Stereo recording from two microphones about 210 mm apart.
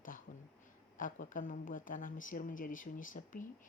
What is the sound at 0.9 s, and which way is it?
Speech, 40° left (ahead or behind).